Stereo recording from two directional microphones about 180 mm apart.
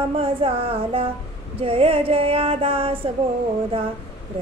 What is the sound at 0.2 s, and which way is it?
Female singing, 30° right (ahead or behind).